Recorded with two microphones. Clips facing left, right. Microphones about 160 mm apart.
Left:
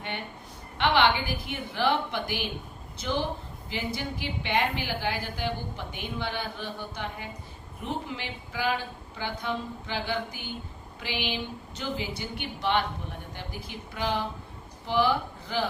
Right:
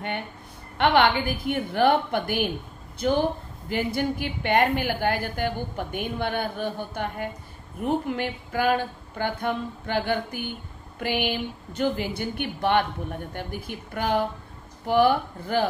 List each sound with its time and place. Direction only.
0.7 s a woman's voice: 55° right (ahead or behind)